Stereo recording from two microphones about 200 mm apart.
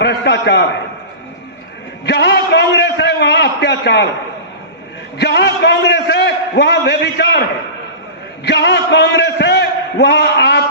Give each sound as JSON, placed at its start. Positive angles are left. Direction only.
{"t": 0.0, "sound": "a sound", "side_deg": 60}
{"t": 2.0, "sound": "a man's voice", "side_deg": 60}
{"t": 5.1, "sound": "a man's voice", "side_deg": 60}
{"t": 8.4, "sound": "a man's voice", "side_deg": 60}